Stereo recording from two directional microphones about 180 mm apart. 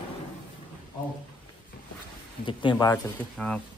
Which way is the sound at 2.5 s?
25° left (ahead or behind).